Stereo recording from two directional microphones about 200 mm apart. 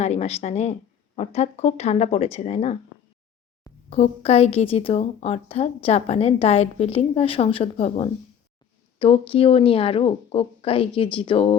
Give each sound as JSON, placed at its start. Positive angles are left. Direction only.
{"t": 0.0, "sound": "a woman's voice", "side_deg": 35}
{"t": 3.8, "sound": "a woman's voice", "side_deg": 30}